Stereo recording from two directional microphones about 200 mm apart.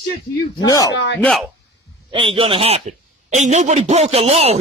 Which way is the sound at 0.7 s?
15° left (ahead or behind).